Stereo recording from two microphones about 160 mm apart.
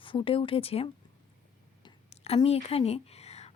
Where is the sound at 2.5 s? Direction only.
40° left (ahead or behind).